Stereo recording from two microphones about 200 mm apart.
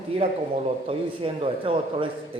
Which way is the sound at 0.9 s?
25° right (ahead or behind).